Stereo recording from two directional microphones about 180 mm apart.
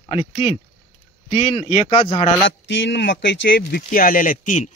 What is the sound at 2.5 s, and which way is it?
Speech, 90° left.